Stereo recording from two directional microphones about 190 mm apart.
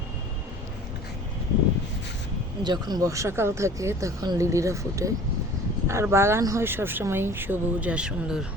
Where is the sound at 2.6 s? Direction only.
20° right (ahead or behind); by 8.5 s 5° right (ahead or behind).